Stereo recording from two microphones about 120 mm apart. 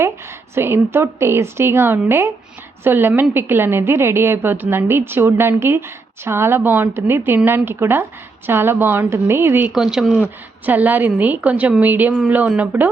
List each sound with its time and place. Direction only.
0.5 s a woman's voice: 20° right (ahead or behind)
9.6 s speech: 5° right (ahead or behind)
10.7 s speech: 15° right (ahead or behind)